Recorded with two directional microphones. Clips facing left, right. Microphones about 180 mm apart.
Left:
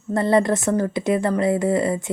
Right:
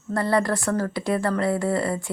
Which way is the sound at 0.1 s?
20° left (ahead or behind).